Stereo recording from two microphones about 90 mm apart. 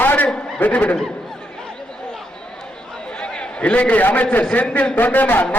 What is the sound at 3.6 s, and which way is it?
A man's voice, 15° left (ahead or behind).